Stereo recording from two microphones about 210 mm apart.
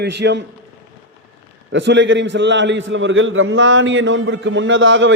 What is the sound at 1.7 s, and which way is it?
A man's voice, 60° right (ahead or behind).